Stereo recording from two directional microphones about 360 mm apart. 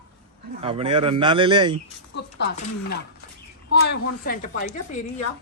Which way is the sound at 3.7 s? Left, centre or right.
Left.